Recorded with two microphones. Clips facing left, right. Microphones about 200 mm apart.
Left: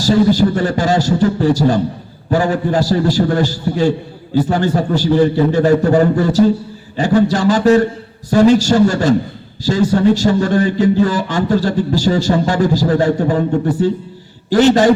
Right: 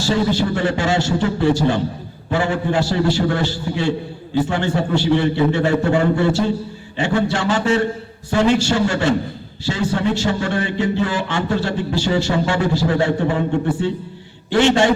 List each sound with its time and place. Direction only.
0.0 s a man's voice: 40° left (ahead or behind)